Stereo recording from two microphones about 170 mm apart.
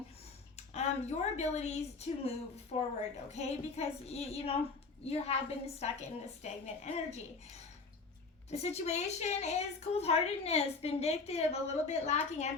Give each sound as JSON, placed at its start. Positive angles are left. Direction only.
{"t": 0.5, "sound": "a woman's voice", "side_deg": 40}
{"t": 8.4, "sound": "a woman's voice", "side_deg": 40}